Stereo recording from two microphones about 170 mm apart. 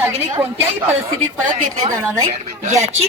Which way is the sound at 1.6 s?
40° right (ahead or behind).